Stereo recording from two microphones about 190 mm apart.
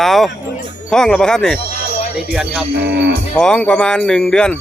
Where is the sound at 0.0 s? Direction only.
Centre (ahead or behind).